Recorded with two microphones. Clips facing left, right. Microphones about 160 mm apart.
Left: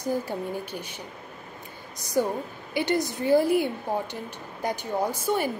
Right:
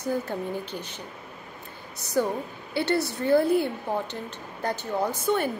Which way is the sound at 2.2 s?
15° left (ahead or behind).